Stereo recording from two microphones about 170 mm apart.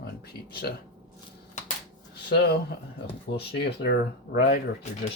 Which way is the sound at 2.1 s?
70° left (ahead or behind).